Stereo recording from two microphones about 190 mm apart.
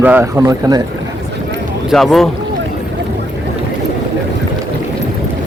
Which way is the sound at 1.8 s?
Centre (ahead or behind).